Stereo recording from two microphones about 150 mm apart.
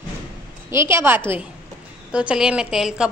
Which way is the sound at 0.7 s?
15° right (ahead or behind).